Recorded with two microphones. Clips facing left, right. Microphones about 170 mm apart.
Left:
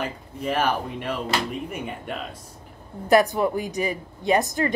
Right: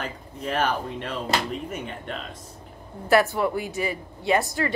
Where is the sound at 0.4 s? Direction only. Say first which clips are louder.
Left 2 dB; 10° left (ahead or behind).